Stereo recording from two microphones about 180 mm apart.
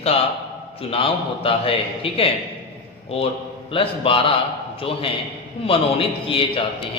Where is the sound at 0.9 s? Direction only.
30° left (ahead or behind).